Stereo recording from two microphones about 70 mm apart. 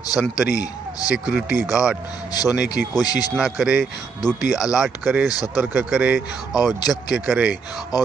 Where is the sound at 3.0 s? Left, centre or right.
Left.